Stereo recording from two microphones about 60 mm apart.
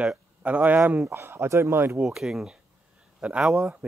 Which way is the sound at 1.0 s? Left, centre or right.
Right.